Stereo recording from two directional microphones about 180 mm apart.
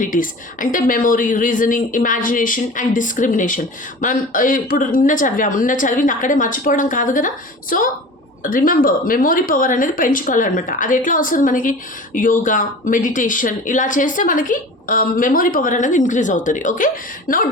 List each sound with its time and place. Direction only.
0.0 s a woman's voice: 45° left (ahead or behind)